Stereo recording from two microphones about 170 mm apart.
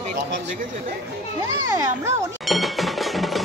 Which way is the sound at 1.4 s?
20° right (ahead or behind).